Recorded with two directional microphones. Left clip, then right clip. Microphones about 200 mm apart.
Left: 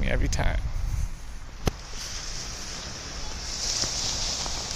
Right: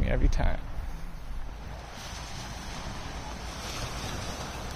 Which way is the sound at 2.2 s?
65° right (ahead or behind).